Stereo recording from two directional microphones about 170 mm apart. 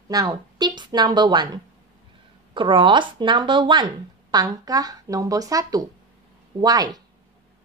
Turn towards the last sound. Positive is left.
turn(degrees=-20)  # may be behind; listen again after turning